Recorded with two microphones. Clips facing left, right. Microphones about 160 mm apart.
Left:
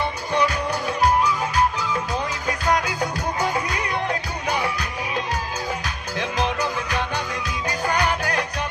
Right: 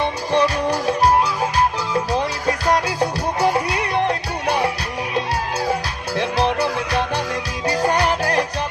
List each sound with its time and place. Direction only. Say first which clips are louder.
0.3 s music: right 4 dB; 30° right (ahead or behind)
6.1 s music: right 5 dB; 35° right (ahead or behind)
7.7 s music: right 5 dB; 35° right (ahead or behind)